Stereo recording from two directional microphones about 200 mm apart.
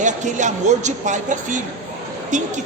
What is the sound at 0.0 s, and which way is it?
A woman's voice, 40° right (ahead or behind).